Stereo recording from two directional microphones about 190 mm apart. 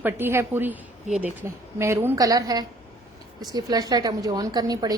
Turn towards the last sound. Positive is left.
turn(degrees=-20)  # may be behind; listen again after turning